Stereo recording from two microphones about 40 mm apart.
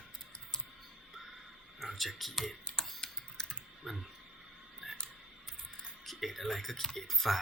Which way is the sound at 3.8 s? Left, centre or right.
Centre.